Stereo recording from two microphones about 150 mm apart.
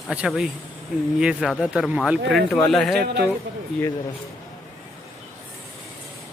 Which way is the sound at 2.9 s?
90° right.